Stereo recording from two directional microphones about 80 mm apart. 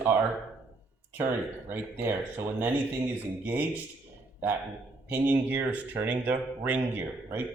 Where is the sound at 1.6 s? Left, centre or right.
Right.